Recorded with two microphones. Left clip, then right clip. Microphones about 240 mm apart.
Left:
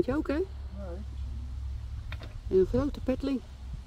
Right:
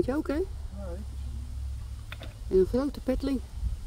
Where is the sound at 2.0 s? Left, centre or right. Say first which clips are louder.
Right 2 dB; centre.